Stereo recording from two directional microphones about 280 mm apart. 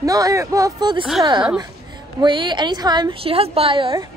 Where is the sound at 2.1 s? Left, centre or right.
Centre.